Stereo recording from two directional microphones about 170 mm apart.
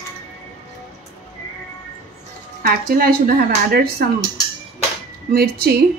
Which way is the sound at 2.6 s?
60° right (ahead or behind).